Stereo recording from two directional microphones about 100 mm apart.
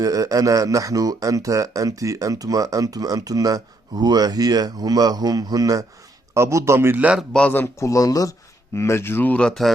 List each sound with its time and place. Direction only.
0.0 s a man's voice: 35° right (ahead or behind); by 7.2 s 15° right (ahead or behind)
7.3 s speech: 15° left (ahead or behind)
7.9 s speech: 35° left (ahead or behind); by 9.7 s 5° left (ahead or behind)